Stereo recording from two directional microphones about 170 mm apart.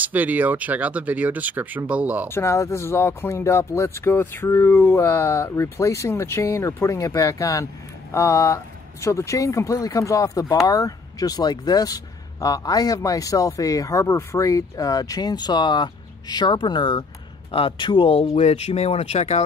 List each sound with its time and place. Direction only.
0.0 s speech: 10° right (ahead or behind)
2.3 s speech: 15° left (ahead or behind); by 19.4 s 40° left (ahead or behind)